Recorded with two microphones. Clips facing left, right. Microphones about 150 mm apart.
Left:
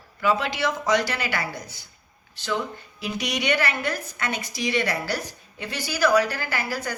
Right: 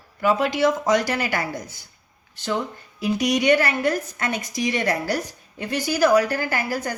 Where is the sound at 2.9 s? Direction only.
45° right (ahead or behind).